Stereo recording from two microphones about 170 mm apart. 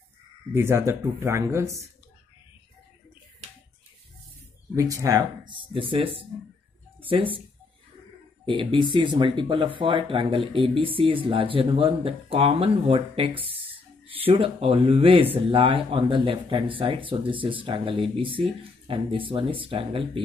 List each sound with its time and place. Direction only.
0.6 s speech: 15° right (ahead or behind)
4.7 s speech: 20° right (ahead or behind)
5.5 s speech: 30° right (ahead or behind)
8.5 s speech: 30° right (ahead or behind)